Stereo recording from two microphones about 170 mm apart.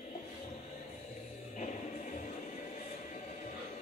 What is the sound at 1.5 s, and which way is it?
Music, 45° left (ahead or behind).